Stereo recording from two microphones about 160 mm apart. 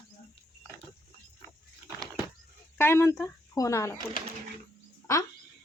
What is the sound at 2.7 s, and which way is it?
Speech, 15° left (ahead or behind).